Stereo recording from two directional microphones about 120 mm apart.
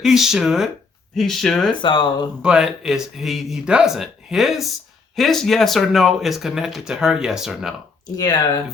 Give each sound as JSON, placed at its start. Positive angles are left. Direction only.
{"t": 0.0, "sound": "speech", "side_deg": -5}
{"t": 1.8, "sound": "speech", "side_deg": 40}
{"t": 2.4, "sound": "speech", "side_deg": -5}
{"t": 8.1, "sound": "speech", "side_deg": 35}